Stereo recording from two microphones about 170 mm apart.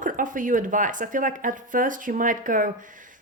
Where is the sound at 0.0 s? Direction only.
50° right (ahead or behind).